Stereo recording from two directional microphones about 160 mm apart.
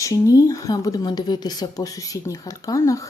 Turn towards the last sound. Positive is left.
turn(degrees=20)  # may be behind; listen again after turning